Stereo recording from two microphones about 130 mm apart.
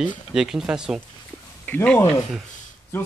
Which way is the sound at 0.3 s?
5° right (ahead or behind).